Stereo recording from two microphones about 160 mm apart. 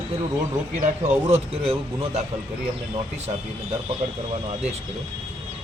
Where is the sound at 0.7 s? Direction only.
45° right (ahead or behind).